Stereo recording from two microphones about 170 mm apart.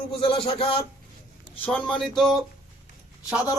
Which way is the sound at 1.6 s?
5° left (ahead or behind).